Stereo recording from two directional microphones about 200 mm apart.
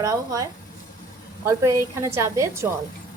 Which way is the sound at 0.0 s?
15° right (ahead or behind).